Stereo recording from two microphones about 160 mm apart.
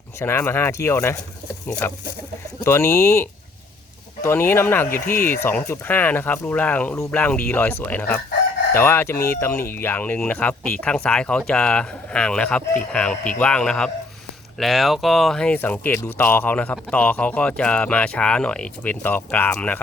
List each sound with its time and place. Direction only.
0.2 s speech: 15° left (ahead or behind)
2.6 s speech: 15° left (ahead or behind)